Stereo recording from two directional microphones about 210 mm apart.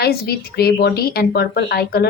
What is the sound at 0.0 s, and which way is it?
A woman's voice, 50° left (ahead or behind).